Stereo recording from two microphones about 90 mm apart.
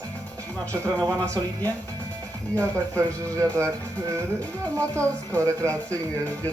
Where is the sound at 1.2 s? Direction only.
15° left (ahead or behind).